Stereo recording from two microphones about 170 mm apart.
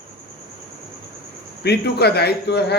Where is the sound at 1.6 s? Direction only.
75° left (ahead or behind).